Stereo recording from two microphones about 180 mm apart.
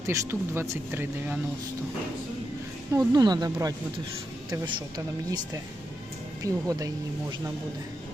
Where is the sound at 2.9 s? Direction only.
20° right (ahead or behind).